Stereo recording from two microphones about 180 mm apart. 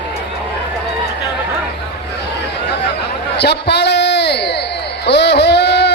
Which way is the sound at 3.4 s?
70° left (ahead or behind).